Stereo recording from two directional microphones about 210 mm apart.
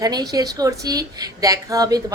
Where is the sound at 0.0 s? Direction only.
15° right (ahead or behind).